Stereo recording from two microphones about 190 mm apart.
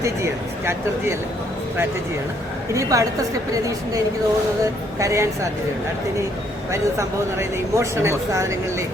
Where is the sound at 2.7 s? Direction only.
15° right (ahead or behind).